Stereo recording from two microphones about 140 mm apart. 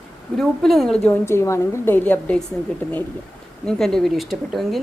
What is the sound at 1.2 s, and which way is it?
A woman's voice, 20° left (ahead or behind).